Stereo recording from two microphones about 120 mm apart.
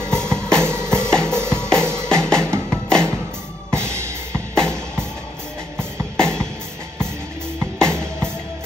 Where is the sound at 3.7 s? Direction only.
20° right (ahead or behind).